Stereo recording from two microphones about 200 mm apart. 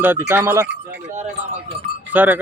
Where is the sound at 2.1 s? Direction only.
10° right (ahead or behind).